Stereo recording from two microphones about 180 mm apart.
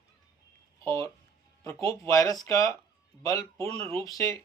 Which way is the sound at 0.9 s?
15° left (ahead or behind).